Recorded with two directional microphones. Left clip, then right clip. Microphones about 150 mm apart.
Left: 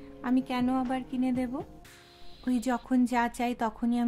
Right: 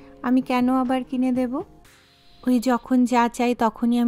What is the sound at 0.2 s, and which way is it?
Speech, 40° right (ahead or behind).